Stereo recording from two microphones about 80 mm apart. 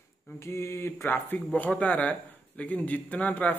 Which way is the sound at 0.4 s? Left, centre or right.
Left.